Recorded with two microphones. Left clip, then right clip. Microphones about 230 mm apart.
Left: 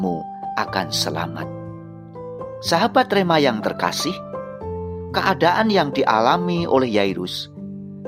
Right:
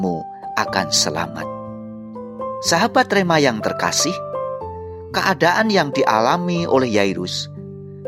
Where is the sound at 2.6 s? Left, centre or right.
Right.